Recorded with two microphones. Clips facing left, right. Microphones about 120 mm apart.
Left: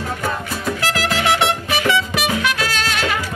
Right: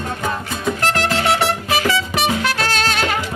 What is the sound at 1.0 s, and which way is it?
Music, 30° right (ahead or behind).